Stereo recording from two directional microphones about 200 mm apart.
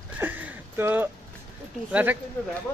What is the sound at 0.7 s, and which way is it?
Speech, 10° right (ahead or behind).